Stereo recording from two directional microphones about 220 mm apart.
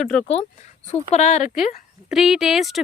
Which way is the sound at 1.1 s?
30° left (ahead or behind).